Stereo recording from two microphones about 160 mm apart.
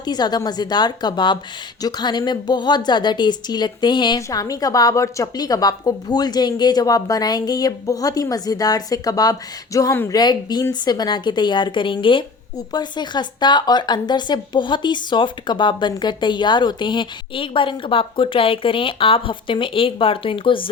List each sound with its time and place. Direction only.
0.0 s a woman's voice: 25° left (ahead or behind)